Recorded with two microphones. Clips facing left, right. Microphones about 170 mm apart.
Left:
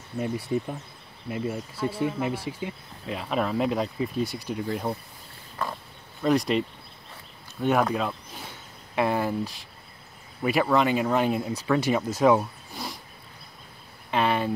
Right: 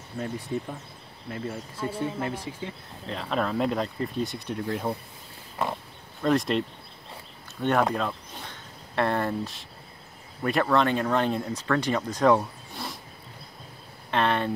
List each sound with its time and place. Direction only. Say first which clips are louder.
0.2 s speech: left 4 dB; 15° left (ahead or behind)
5.6 s speech: right 3 dB; 25° right (ahead or behind)
6.2 s speech: left 1 dB; centre (ahead or behind)
7.6 s speech: left 1 dB; centre (ahead or behind)
14.1 s a sound: left 1 dB; 5° left (ahead or behind)